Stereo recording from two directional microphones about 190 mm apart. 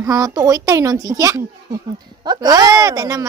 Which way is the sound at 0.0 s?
20° right (ahead or behind).